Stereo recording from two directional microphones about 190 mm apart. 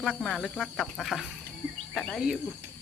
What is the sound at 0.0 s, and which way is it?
Speech, centre (ahead or behind).